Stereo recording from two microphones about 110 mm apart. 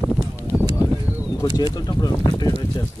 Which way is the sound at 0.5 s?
10° right (ahead or behind).